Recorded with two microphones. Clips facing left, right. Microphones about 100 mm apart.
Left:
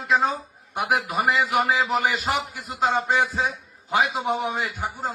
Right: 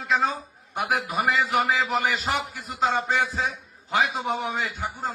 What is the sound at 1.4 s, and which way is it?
A man's voice, 15° left (ahead or behind).